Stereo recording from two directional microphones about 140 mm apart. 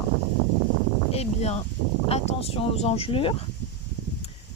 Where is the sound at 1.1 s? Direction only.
45° left (ahead or behind).